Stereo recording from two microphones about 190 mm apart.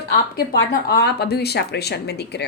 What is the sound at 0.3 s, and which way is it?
A woman's voice, 60° left (ahead or behind).